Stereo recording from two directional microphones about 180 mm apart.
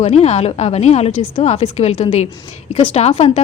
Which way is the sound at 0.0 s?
35° left (ahead or behind).